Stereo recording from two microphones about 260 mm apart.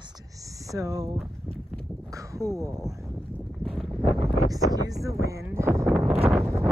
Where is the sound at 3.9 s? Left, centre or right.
Centre.